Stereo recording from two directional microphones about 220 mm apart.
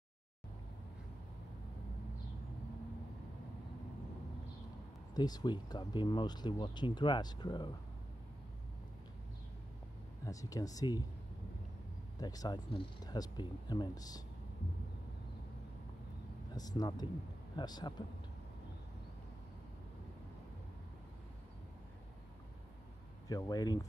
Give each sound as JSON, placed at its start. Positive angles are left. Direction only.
{"t": 5.1, "sound": "speech", "side_deg": 20}
{"t": 10.2, "sound": "speech", "side_deg": 15}
{"t": 12.2, "sound": "speech", "side_deg": 15}
{"t": 16.5, "sound": "speech", "side_deg": 15}
{"t": 23.2, "sound": "speech", "side_deg": 15}